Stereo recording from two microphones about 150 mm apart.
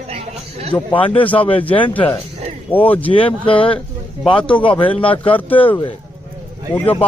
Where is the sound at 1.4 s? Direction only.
35° left (ahead or behind).